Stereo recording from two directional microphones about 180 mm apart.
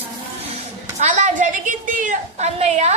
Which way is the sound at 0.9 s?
45° right (ahead or behind).